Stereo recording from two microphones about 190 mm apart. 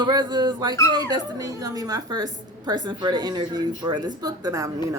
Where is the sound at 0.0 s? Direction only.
25° right (ahead or behind).